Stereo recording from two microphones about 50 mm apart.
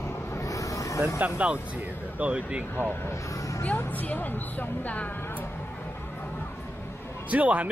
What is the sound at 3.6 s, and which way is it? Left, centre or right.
Speech, left.